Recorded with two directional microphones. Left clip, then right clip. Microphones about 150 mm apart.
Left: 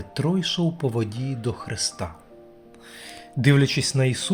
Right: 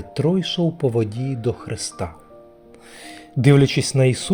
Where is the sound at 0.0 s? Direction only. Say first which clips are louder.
Right 4 dB; 15° right (ahead or behind).